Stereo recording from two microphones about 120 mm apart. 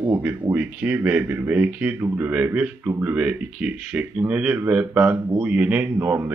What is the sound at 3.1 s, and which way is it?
Speech, 10° right (ahead or behind).